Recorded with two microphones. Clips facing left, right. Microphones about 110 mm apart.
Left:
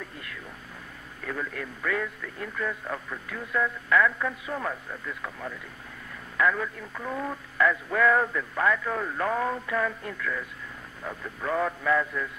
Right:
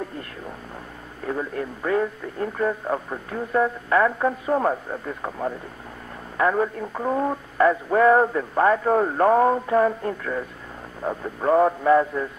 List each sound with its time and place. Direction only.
1.2 s speech: 30° right (ahead or behind)